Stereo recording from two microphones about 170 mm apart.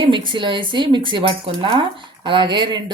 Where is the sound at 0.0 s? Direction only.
30° right (ahead or behind).